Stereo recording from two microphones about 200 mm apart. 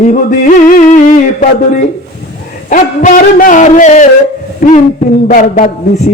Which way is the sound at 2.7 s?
40° left (ahead or behind).